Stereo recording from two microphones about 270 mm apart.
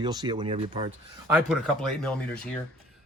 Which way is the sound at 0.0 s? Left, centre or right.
Centre.